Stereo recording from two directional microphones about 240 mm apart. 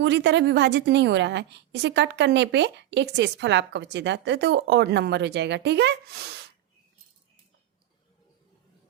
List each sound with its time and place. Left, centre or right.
0.0 s a woman's voice: right